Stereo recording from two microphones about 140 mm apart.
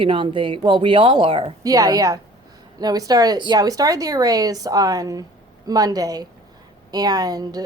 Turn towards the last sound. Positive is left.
turn(degrees=-25)  # may be behind; listen again after turning